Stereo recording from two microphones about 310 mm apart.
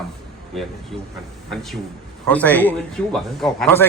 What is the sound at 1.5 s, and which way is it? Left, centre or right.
A man's voice, centre.